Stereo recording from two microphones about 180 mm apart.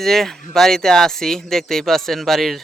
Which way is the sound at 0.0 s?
Centre (ahead or behind).